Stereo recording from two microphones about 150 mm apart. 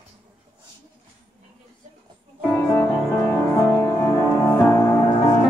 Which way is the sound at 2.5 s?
10° left (ahead or behind).